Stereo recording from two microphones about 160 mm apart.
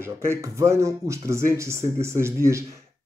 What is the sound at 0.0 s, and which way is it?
Speech, 15° right (ahead or behind).